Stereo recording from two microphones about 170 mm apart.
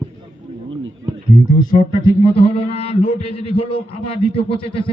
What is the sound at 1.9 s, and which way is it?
A man's voice, 30° left (ahead or behind).